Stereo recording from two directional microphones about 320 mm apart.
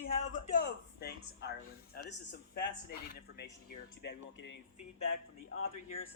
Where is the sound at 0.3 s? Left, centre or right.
Left.